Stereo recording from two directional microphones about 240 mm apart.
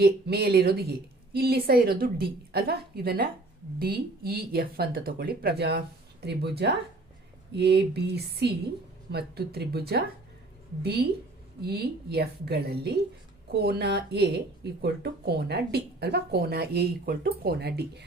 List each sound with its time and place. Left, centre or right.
0.0 s a woman's voice: right